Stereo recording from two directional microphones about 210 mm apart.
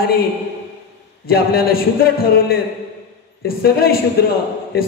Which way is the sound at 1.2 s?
45° left (ahead or behind).